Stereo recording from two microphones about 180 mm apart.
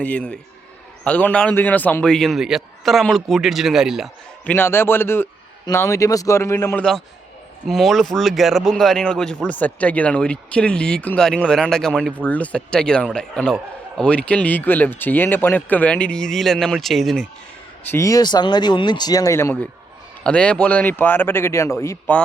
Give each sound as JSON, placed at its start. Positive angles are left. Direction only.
{"t": 0.0, "sound": "a man's voice", "side_deg": 5}
{"t": 4.5, "sound": "a man's voice", "side_deg": 10}
{"t": 7.7, "sound": "a man's voice", "side_deg": 0}
{"t": 17.9, "sound": "a man's voice", "side_deg": 20}